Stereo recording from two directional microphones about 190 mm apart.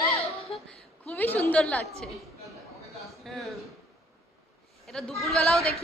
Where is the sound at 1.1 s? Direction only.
10° left (ahead or behind).